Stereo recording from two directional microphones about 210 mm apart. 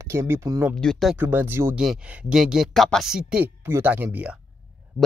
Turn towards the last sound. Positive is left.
turn(degrees=-5)  # may be behind; listen again after turning